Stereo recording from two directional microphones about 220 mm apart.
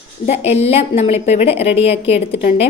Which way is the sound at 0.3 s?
30° left (ahead or behind).